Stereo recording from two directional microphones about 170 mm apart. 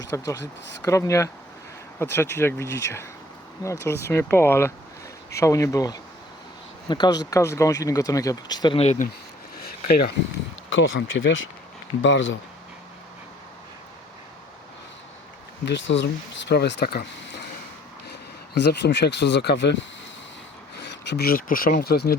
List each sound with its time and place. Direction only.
0.1 s speech: 20° left (ahead or behind)
8.8 s speech: 40° left (ahead or behind)
10.7 s speech: 90° left
15.6 s speech: 90° left; by 17.1 s 70° left (ahead or behind)
18.1 s speech: 85° left
21.0 s speech: 80° left